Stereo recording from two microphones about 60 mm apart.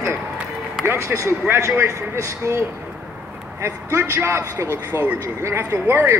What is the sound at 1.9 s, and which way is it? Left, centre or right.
Speech, right.